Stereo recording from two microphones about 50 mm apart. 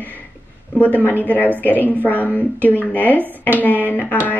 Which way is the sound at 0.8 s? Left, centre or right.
Left.